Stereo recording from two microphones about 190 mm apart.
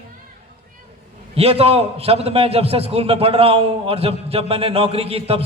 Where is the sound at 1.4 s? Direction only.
30° right (ahead or behind).